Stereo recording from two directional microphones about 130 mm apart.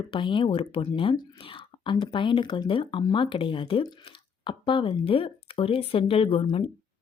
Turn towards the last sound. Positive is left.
turn(degrees=40)  # may be behind; listen again after turning